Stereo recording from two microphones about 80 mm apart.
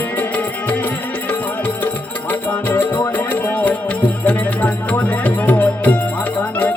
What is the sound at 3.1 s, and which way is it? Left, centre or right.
Music, left.